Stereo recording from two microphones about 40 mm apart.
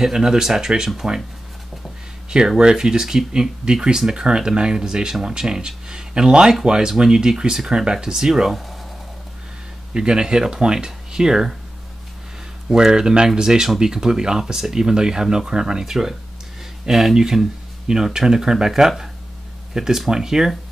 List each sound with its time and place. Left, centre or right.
0.0 s speech: centre
2.2 s speech: centre
8.5 s speech: centre
9.9 s speech: centre
12.7 s speech: centre